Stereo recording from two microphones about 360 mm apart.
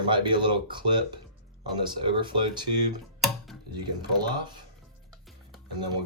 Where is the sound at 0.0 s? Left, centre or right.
Centre.